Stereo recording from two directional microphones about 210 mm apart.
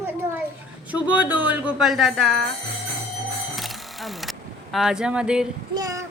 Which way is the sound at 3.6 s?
Centre (ahead or behind).